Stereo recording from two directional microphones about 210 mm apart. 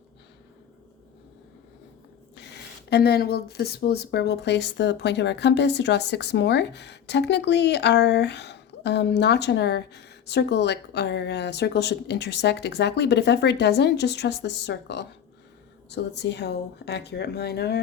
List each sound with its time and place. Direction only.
2.3 s speech: 55° left (ahead or behind)